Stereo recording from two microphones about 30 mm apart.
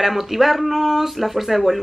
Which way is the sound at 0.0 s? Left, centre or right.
Centre.